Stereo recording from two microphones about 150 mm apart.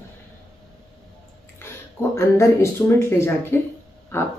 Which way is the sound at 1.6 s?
15° left (ahead or behind).